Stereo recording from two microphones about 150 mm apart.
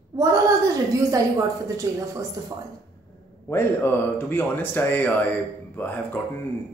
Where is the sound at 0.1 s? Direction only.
20° right (ahead or behind).